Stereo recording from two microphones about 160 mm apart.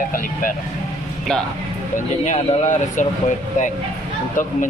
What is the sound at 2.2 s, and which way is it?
Speech, 50° left (ahead or behind).